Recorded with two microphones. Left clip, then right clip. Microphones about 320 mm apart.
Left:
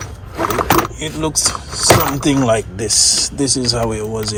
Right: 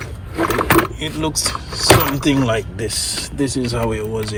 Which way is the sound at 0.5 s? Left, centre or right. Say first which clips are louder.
Left 1 dB; centre.